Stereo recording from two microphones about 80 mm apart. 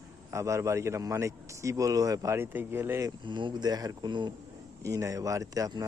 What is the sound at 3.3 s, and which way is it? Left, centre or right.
Speech, right.